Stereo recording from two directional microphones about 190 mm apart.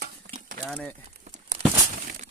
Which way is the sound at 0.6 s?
5° left (ahead or behind).